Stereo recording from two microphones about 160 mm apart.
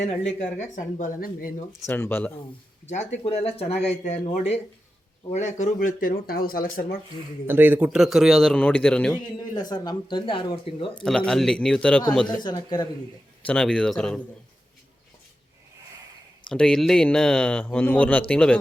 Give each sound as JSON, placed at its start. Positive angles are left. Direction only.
{"t": 0.5, "sound": "speech", "side_deg": 50}
{"t": 1.9, "sound": "speech", "side_deg": 15}
{"t": 2.8, "sound": "speech", "side_deg": 45}
{"t": 7.4, "sound": "speech", "side_deg": -10}
{"t": 9.6, "sound": "speech", "side_deg": 25}
{"t": 11.0, "sound": "speech", "side_deg": 5}
{"t": 12.4, "sound": "speech", "side_deg": 25}
{"t": 13.4, "sound": "speech", "side_deg": 5}
{"t": 16.5, "sound": "speech", "side_deg": 5}